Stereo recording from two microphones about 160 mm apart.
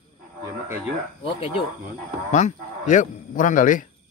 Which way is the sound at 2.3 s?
50° left (ahead or behind).